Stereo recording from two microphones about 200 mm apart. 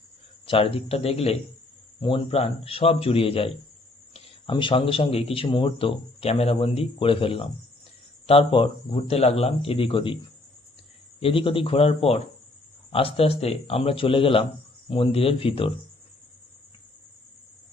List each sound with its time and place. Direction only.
0.4 s speech: 25° left (ahead or behind)
11.2 s speech: 25° left (ahead or behind)